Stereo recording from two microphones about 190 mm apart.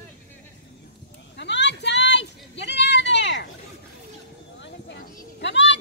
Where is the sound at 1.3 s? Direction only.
65° left (ahead or behind).